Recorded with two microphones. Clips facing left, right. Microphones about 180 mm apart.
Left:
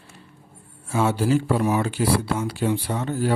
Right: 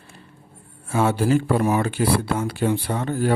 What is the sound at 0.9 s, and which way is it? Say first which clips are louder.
Speech: right 1 dB; 55° right (ahead or behind).